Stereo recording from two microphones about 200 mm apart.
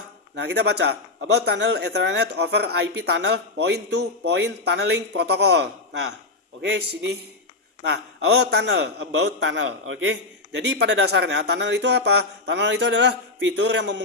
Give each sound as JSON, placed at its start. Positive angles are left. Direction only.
{"t": 0.3, "sound": "a man's voice", "side_deg": -55}